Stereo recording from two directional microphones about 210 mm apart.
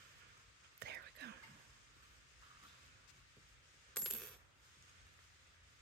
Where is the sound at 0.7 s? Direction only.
50° right (ahead or behind).